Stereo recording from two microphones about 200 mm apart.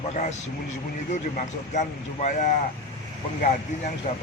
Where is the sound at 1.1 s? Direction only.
35° left (ahead or behind).